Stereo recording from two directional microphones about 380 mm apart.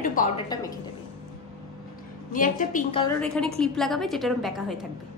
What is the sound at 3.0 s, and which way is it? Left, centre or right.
A woman's voice, centre.